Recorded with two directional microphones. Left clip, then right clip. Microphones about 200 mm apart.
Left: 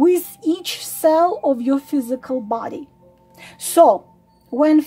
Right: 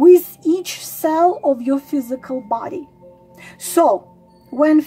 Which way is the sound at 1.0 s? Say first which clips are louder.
Even; 30° left (ahead or behind).